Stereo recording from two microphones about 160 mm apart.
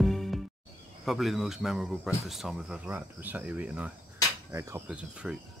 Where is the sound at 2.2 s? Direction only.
Centre (ahead or behind).